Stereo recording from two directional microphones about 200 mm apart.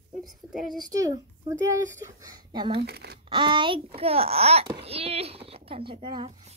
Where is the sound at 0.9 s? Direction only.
15° right (ahead or behind).